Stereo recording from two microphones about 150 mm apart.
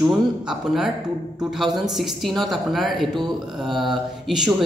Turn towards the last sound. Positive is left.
turn(degrees=0)  # may be behind; listen again after turning